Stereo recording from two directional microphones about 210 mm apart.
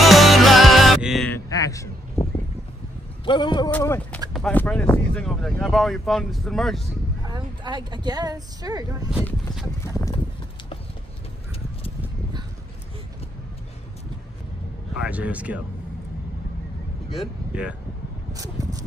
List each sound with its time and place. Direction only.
0.0 s music: centre (ahead or behind)
1.3 s a sound: 15° left (ahead or behind)
3.3 s a man's voice: 20° left (ahead or behind)
3.7 s speech: 10° left (ahead or behind)
7.2 s speech: 20° right (ahead or behind)
9.2 s speech: centre (ahead or behind)
9.8 s speech: 15° left (ahead or behind)
15.0 s speech: 5° right (ahead or behind)
17.1 s speech: 5° right (ahead or behind)
18.3 s a sound: 15° right (ahead or behind)